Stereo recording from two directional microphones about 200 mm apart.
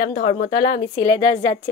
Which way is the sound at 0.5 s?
20° left (ahead or behind).